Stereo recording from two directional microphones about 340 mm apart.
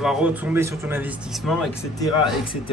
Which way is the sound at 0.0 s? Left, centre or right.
Centre.